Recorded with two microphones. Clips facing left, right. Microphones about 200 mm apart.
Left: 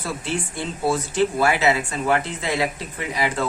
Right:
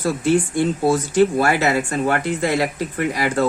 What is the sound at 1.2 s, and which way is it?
Speech, 50° right (ahead or behind).